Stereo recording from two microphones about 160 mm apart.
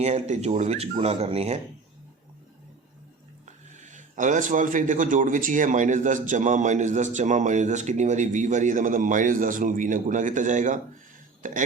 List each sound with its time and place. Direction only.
0.0 s speech: 45° right (ahead or behind)
3.4 s speech: 50° right (ahead or behind)